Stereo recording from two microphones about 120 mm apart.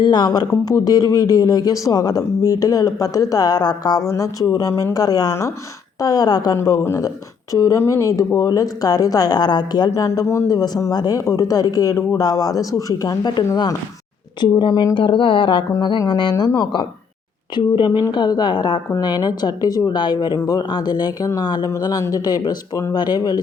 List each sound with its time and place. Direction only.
0.0 s a woman's voice: 35° left (ahead or behind)